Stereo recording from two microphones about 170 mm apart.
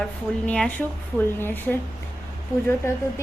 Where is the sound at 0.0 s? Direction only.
5° left (ahead or behind).